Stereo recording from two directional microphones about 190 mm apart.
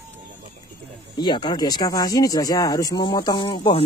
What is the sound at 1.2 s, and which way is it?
Speech, 25° left (ahead or behind).